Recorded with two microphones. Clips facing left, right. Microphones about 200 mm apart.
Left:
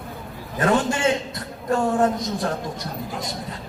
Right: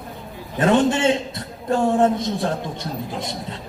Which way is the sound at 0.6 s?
30° right (ahead or behind).